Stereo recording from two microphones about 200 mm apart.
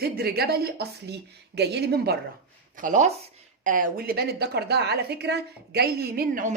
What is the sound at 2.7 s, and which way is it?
Speech, 40° right (ahead or behind).